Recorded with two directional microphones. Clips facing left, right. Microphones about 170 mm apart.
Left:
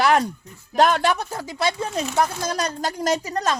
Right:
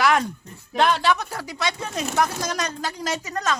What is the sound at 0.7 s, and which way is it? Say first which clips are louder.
Speech: left 2 dB; 45° left (ahead or behind).